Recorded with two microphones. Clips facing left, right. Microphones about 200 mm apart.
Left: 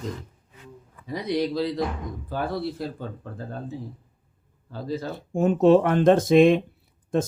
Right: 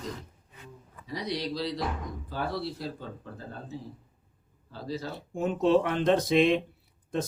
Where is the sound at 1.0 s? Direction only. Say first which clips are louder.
Left 7 dB; 50° left (ahead or behind).